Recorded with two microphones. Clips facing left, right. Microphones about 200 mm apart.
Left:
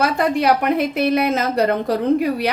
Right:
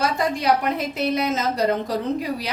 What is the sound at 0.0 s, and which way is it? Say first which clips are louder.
A woman's voice: left 5 dB; 60° left (ahead or behind).